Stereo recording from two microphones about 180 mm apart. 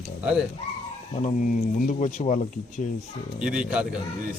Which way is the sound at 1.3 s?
45° left (ahead or behind).